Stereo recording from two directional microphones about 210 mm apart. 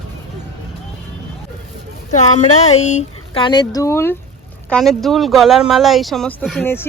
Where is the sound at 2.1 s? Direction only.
35° left (ahead or behind).